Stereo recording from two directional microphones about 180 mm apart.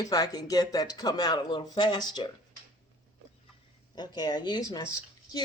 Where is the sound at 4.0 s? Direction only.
20° left (ahead or behind).